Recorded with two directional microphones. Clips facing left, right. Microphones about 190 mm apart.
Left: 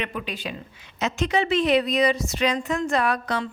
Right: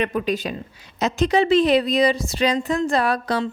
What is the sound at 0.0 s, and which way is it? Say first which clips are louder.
Speech: right 8 dB; 40° right (ahead or behind).